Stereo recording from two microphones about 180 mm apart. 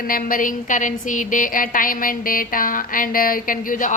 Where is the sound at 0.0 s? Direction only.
50° left (ahead or behind).